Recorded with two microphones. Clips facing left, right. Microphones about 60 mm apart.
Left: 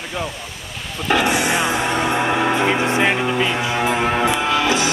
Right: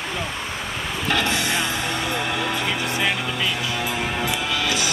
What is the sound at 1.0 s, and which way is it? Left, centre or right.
Music, centre.